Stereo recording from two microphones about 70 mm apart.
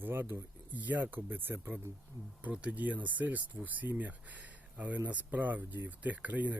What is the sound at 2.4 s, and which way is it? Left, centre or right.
Speech, centre.